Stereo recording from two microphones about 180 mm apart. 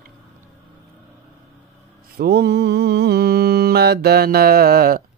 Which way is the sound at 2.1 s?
60° right (ahead or behind).